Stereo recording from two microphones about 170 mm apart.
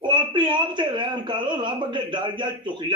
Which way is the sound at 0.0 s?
25° right (ahead or behind).